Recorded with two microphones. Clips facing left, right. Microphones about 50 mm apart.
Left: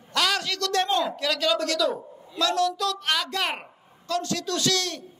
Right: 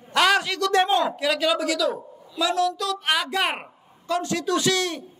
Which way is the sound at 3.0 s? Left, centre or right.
Centre.